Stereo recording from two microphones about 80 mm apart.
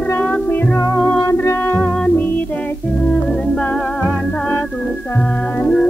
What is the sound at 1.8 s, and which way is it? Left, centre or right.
Music, centre.